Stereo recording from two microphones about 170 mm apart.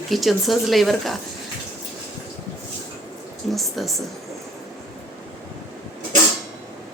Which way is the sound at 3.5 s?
Centre (ahead or behind).